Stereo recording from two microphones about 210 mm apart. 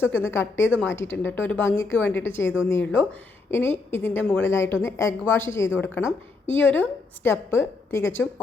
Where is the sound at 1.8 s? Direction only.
70° left (ahead or behind).